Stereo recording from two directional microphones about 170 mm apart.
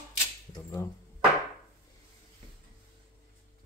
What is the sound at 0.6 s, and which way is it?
Speech, 15° left (ahead or behind).